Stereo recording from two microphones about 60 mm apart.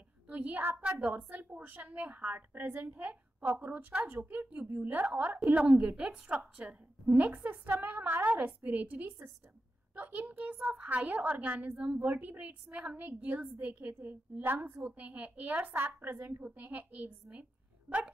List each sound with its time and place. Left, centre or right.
0.3 s a child's voice: right
3.0 s a woman's voice: right
14.9 s a woman's voice: right